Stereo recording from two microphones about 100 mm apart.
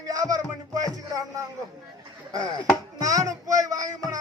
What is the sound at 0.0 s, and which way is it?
Music, 35° right (ahead or behind).